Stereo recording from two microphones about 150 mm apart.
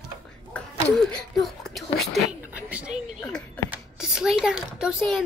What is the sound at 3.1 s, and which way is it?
Speech, 5° left (ahead or behind).